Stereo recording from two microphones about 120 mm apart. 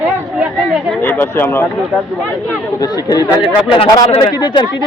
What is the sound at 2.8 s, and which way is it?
Speech, 30° left (ahead or behind).